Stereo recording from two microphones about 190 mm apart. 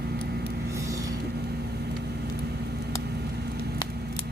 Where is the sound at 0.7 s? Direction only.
15° right (ahead or behind).